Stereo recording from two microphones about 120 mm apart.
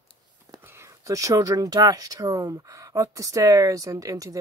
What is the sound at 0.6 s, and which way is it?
Speech, 20° right (ahead or behind).